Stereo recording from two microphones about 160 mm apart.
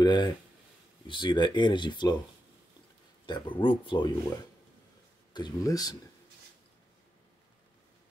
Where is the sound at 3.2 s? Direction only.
30° left (ahead or behind).